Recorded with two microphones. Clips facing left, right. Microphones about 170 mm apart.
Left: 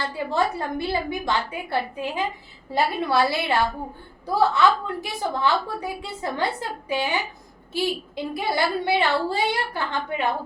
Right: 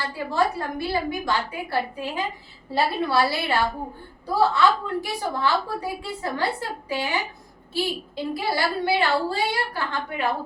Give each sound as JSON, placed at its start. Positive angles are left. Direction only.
{"t": 0.0, "sound": "a woman's voice", "side_deg": 20}